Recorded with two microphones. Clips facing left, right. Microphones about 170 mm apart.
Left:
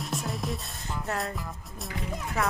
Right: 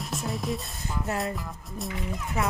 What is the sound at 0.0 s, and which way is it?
Music, centre (ahead or behind).